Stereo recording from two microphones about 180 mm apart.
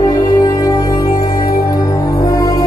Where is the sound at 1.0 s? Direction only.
50° left (ahead or behind).